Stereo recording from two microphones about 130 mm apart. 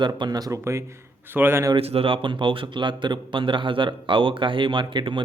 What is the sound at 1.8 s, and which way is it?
Speech, 50° right (ahead or behind).